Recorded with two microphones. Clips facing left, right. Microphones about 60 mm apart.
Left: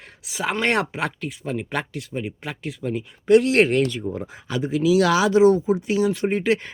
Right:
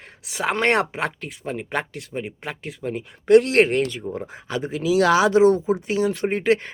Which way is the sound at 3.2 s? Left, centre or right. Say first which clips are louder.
Right 1 dB; right.